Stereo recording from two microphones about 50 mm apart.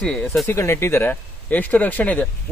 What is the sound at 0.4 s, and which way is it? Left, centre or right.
Speech, left.